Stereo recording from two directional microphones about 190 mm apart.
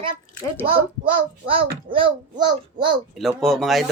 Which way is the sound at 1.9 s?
25° right (ahead or behind).